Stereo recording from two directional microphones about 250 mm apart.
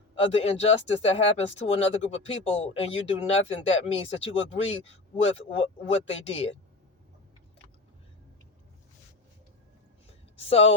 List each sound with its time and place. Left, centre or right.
0.2 s speech: left
4.4 s speech: left
4.8 s speech: left